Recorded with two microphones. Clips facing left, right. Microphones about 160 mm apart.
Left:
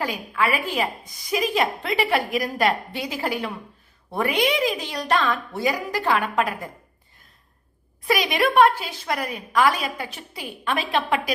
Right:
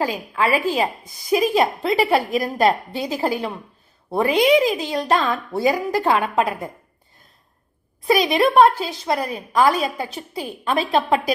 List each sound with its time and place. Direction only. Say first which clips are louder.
0.0 s a woman's voice: right 3 dB; 30° right (ahead or behind)
8.0 s a woman's voice: right 5 dB; 30° right (ahead or behind)